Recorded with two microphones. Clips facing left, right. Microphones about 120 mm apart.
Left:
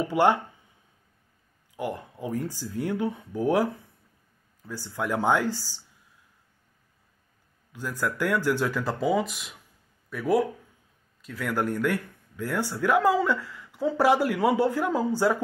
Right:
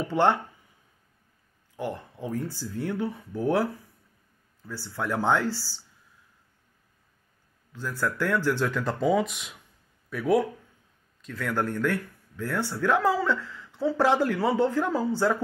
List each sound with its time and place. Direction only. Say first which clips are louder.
0.1 s speech: left 1 dB; 10° left (ahead or behind)
1.8 s speech: left 1 dB; 10° left (ahead or behind)
7.7 s speech: even; 15° left (ahead or behind)